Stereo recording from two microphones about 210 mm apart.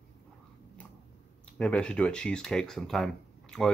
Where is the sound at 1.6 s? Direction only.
5° left (ahead or behind).